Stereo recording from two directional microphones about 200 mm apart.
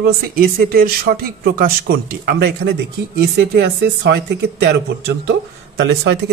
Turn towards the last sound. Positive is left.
turn(degrees=-60)  # may be behind; listen again after turning